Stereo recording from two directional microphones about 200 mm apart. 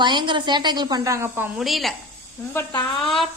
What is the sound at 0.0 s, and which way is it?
A woman's voice, 25° right (ahead or behind).